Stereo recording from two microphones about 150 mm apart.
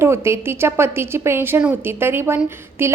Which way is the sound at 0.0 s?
15° right (ahead or behind).